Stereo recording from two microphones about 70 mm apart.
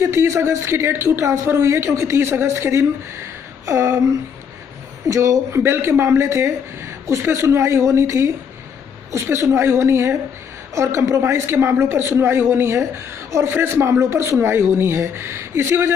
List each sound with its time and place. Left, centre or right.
0.0 s a woman's voice: right
5.0 s speech: right
5.6 s a woman's voice: right